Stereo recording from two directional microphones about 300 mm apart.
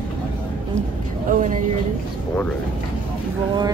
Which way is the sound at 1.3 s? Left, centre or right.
Right.